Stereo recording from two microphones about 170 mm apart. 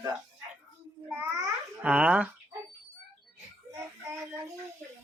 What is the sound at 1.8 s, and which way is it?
Speech, 5° right (ahead or behind).